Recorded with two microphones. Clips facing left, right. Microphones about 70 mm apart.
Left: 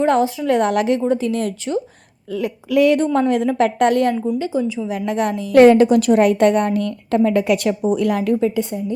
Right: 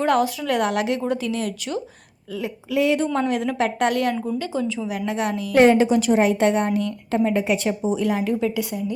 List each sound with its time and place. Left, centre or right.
0.0 s a woman's voice: left
0.7 s a woman's voice: left
2.4 s a woman's voice: left
3.1 s a woman's voice: left
4.1 s a woman's voice: left
4.9 s a woman's voice: left
7.3 s a woman's voice: left
7.9 s a woman's voice: left
8.4 s a woman's voice: left